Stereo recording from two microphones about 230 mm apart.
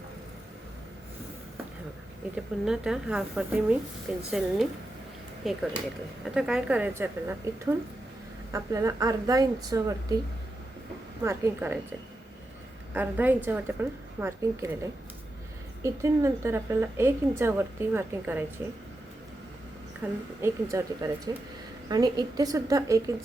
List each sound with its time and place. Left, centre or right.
2.3 s a woman's voice: centre
11.2 s a woman's voice: centre
12.9 s a woman's voice: centre
15.8 s a woman's voice: centre
20.0 s a woman's voice: centre